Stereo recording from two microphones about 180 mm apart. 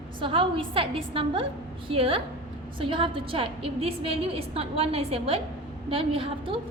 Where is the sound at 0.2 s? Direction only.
30° right (ahead or behind).